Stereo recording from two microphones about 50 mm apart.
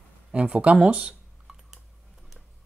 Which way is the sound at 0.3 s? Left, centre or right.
Right.